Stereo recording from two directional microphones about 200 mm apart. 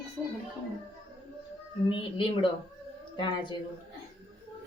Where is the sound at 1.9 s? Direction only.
25° left (ahead or behind).